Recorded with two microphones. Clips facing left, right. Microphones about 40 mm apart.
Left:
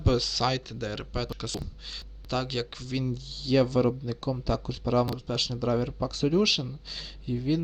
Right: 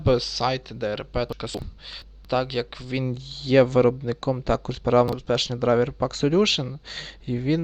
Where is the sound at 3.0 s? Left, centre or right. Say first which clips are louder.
Right 3 dB; right.